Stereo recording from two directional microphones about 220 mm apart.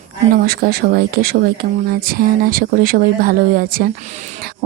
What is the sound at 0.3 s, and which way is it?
Speech, 45° right (ahead or behind).